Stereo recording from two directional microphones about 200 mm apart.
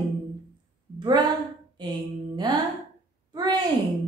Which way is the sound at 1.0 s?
20° right (ahead or behind).